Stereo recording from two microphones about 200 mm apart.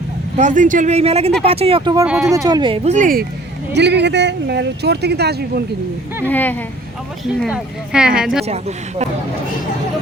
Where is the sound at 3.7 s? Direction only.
60° right (ahead or behind).